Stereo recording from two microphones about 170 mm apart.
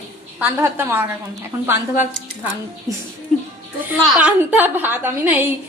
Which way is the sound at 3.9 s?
10° right (ahead or behind).